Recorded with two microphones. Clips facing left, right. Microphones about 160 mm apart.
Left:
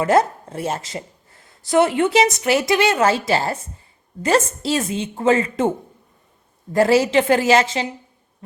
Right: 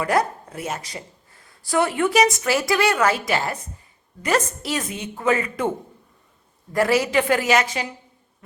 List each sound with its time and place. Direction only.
0.0 s a woman's voice: 25° left (ahead or behind)
6.7 s a woman's voice: 30° left (ahead or behind)